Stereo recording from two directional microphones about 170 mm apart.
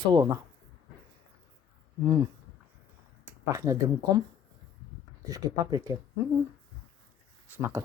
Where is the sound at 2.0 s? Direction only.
20° right (ahead or behind).